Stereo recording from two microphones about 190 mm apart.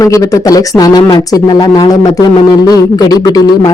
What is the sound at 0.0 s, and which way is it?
Speech, 15° left (ahead or behind).